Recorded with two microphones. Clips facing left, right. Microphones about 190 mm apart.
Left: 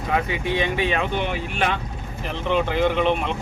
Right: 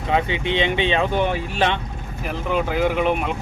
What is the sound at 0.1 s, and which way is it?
Speech, 25° right (ahead or behind).